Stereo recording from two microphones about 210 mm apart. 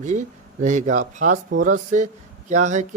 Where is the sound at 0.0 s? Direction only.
35° right (ahead or behind).